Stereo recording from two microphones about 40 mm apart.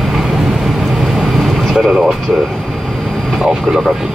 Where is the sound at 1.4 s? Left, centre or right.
Centre.